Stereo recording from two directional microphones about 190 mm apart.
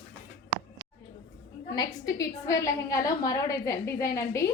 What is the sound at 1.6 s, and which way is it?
A woman's voice, 20° left (ahead or behind).